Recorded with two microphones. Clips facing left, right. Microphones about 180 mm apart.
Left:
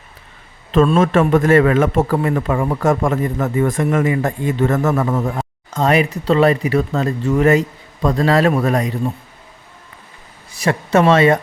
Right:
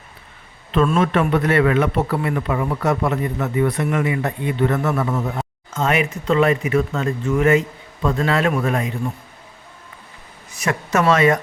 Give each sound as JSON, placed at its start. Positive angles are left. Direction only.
{"t": 0.7, "sound": "a man's voice", "side_deg": 40}
{"t": 10.5, "sound": "speech", "side_deg": 30}